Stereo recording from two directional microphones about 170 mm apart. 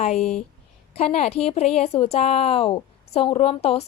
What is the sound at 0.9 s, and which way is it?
A woman's voice, 35° left (ahead or behind).